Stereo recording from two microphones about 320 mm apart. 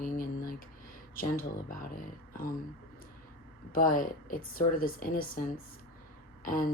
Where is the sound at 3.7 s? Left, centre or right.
Left.